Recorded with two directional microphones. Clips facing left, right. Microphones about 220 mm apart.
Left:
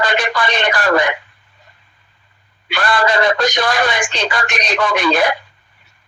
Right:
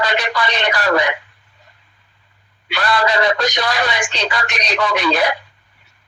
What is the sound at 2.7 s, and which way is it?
Speech, 50° left (ahead or behind).